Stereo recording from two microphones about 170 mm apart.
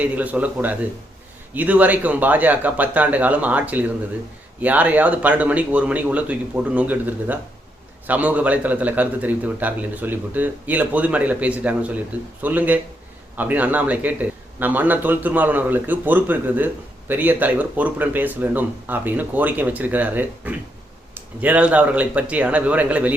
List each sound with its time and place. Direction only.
0.0 s a man's voice: 10° right (ahead or behind)